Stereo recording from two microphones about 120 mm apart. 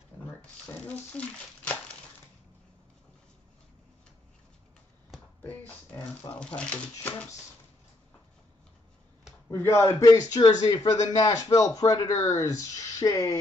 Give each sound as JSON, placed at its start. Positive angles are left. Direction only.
{"t": 0.4, "sound": "speech", "side_deg": 10}
{"t": 5.4, "sound": "a sound", "side_deg": 15}
{"t": 6.3, "sound": "speech", "side_deg": 10}
{"t": 9.5, "sound": "speech", "side_deg": 20}
{"t": 10.0, "sound": "speech", "side_deg": 35}